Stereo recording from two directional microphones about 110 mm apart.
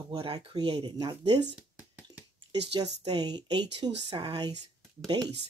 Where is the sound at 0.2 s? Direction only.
55° right (ahead or behind).